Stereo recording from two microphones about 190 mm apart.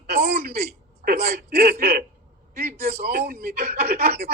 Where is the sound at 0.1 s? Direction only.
55° right (ahead or behind).